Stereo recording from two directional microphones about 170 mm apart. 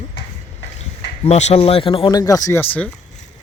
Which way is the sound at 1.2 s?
40° left (ahead or behind).